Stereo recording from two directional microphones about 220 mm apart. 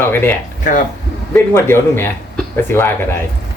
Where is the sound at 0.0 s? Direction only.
10° left (ahead or behind).